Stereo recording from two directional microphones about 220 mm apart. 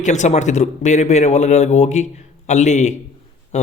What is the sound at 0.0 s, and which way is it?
Speech, 35° left (ahead or behind).